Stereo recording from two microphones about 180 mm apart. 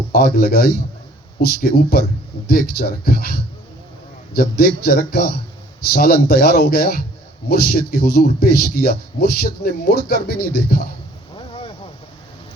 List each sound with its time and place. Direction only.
0.1 s speech: 60° left (ahead or behind)
11.3 s boat: 30° left (ahead or behind)